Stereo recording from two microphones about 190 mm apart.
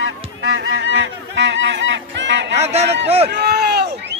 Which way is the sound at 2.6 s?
35° right (ahead or behind).